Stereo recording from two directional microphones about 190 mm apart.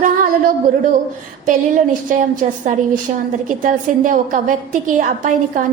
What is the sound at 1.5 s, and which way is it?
A woman's voice, 45° right (ahead or behind).